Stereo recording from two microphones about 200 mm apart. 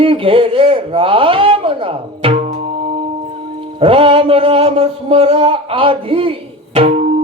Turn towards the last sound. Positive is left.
turn(degrees=-30)  # may be behind; listen again after turning